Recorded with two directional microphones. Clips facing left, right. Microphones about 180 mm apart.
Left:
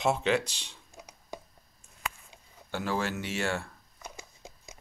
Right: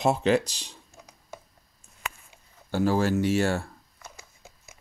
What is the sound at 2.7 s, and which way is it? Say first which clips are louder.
Speech: right 8 dB; 40° right (ahead or behind).